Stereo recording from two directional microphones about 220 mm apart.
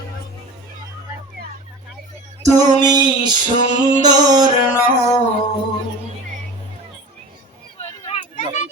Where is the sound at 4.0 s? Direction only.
20° right (ahead or behind).